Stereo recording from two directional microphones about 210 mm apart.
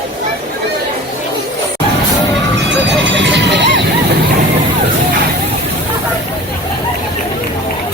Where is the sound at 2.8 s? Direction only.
55° right (ahead or behind).